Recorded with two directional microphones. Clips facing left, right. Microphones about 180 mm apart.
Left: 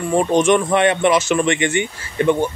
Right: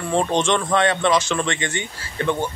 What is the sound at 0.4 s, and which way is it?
Speech, 15° left (ahead or behind).